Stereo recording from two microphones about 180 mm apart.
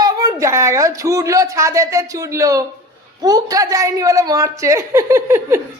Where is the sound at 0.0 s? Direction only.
20° right (ahead or behind).